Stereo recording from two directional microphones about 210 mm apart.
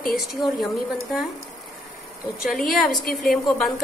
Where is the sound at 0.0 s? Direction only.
Centre (ahead or behind).